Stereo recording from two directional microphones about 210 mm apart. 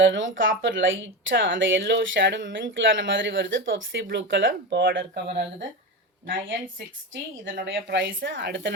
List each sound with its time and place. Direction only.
0.0 s speech: 60° right (ahead or behind)
7.5 s speech: 55° right (ahead or behind)